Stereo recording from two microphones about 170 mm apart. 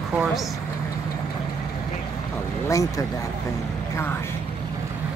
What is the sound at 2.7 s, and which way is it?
Speech, 20° left (ahead or behind).